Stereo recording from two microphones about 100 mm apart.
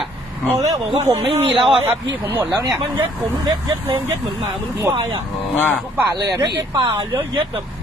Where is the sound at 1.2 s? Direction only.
65° right (ahead or behind).